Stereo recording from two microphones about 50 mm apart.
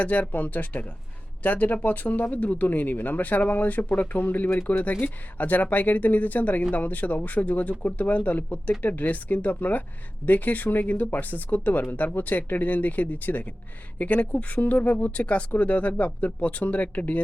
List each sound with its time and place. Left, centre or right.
0.0 s speech: left